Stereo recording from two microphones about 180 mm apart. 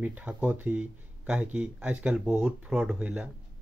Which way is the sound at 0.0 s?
10° right (ahead or behind).